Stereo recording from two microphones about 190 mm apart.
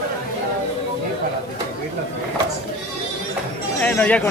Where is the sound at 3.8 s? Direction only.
5° left (ahead or behind).